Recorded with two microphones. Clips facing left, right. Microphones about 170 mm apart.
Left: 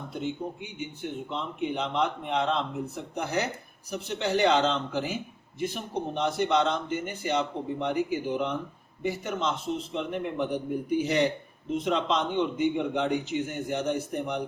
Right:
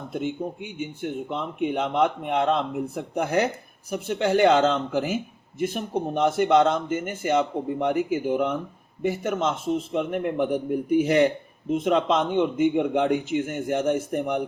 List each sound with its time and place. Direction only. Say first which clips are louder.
1.3 s a man's voice: right 4 dB; 50° right (ahead or behind)